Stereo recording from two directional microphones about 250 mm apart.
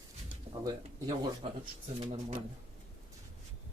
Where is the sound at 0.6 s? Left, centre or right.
Centre.